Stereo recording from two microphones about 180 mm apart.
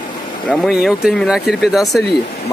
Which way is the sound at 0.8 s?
Centre (ahead or behind).